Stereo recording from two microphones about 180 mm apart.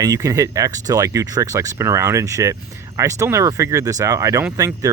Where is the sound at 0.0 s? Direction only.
20° right (ahead or behind).